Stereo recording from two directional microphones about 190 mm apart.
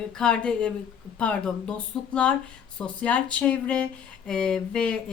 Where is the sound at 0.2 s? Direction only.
5° left (ahead or behind).